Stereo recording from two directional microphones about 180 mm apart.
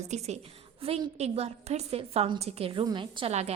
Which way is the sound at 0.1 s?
35° right (ahead or behind).